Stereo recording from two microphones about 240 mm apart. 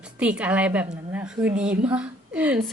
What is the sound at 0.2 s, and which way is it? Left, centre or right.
A woman's voice, centre.